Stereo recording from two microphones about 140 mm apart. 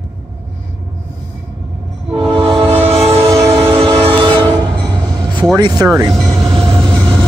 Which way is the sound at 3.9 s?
35° right (ahead or behind).